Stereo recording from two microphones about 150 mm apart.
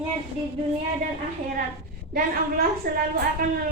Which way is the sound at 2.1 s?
80° right.